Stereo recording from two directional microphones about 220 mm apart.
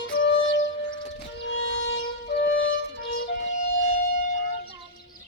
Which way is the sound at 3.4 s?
60° left (ahead or behind).